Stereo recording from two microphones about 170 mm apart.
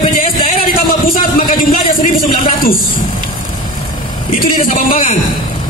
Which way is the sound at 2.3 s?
60° left (ahead or behind).